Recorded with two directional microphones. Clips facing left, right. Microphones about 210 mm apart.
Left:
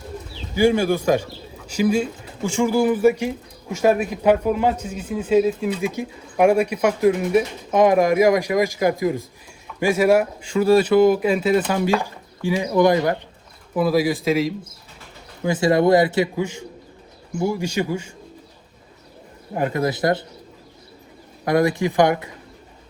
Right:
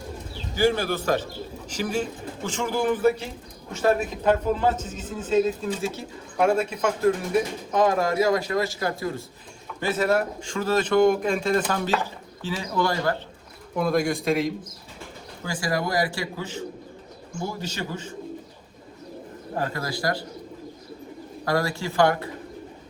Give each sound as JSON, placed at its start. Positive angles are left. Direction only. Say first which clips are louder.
{"t": 0.5, "sound": "speech", "louder": "left 5 dB", "side_deg": 15}
{"t": 13.7, "sound": "speech", "louder": "left 4 dB", "side_deg": 5}
{"t": 15.4, "sound": "speech", "louder": "left 11 dB", "side_deg": 25}
{"t": 19.5, "sound": "speech", "louder": "left 7 dB", "side_deg": 20}
{"t": 21.4, "sound": "speech", "louder": "left 7 dB", "side_deg": 20}